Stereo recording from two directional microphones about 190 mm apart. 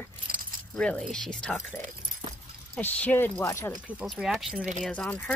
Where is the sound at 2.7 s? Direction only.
5° left (ahead or behind).